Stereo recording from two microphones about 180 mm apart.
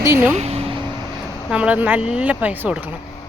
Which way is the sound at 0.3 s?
35° right (ahead or behind).